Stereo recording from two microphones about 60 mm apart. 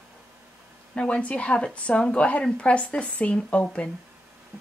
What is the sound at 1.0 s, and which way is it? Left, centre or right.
Speech, centre.